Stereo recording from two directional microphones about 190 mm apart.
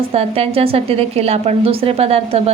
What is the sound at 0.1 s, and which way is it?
A woman's voice, 30° right (ahead or behind).